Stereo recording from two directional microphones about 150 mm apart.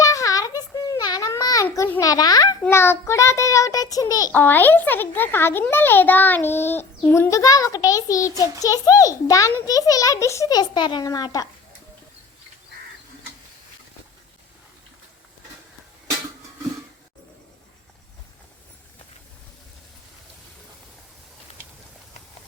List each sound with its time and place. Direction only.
0.0 s a sound: 20° left (ahead or behind)
1.6 s a child's voice: 15° left (ahead or behind)
4.3 s a child's voice: 10° left (ahead or behind)